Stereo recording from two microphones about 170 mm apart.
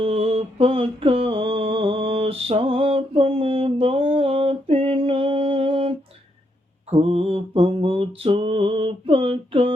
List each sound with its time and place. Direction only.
0.0 s mantra: 35° right (ahead or behind)
6.9 s mantra: 35° right (ahead or behind)